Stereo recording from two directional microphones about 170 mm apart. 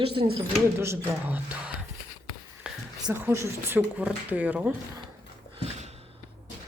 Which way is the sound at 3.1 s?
15° right (ahead or behind).